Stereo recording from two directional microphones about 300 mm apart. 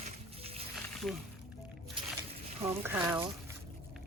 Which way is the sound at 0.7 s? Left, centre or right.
Centre.